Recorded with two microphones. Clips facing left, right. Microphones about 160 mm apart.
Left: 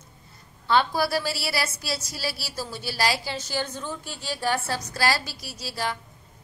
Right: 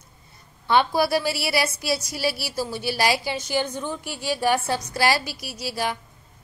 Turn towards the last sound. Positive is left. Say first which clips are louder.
# right 3 dB
turn(degrees=-15)  # may be behind; listen again after turning